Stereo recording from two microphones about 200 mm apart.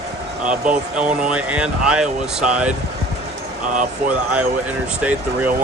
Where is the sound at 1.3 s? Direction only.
5° right (ahead or behind).